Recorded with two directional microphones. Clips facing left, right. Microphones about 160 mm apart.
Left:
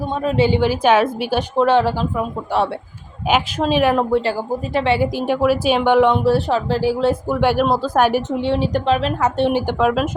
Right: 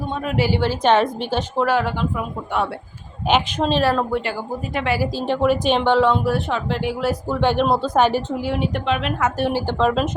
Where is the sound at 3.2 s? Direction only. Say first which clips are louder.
Left 1 dB; 5° left (ahead or behind).